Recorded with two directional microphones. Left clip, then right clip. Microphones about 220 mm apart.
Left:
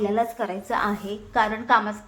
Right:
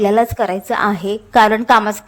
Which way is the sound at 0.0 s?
45° right (ahead or behind).